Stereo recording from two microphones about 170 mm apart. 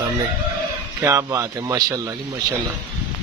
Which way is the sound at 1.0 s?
20° right (ahead or behind).